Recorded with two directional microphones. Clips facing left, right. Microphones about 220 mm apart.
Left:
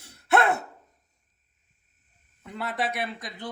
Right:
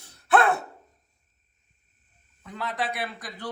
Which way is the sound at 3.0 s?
20° left (ahead or behind).